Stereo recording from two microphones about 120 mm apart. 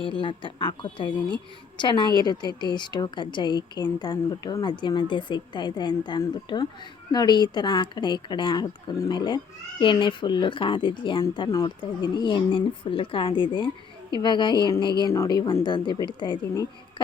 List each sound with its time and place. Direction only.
0.0 s a woman's voice: 45° left (ahead or behind)